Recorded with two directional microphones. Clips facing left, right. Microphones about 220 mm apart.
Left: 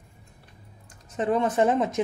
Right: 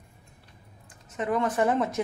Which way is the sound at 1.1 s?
30° left (ahead or behind).